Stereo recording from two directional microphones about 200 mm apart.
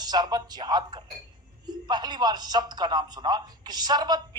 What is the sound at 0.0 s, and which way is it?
Speech, 20° right (ahead or behind).